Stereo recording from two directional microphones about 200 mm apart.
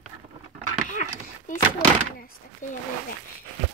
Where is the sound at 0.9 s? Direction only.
40° left (ahead or behind).